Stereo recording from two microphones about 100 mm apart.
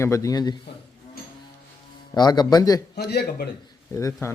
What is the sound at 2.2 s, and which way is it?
Speech, 45° left (ahead or behind).